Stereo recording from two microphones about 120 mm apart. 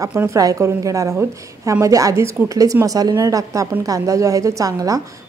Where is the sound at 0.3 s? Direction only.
30° right (ahead or behind).